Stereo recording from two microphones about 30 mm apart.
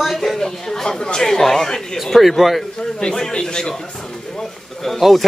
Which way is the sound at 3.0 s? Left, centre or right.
Left.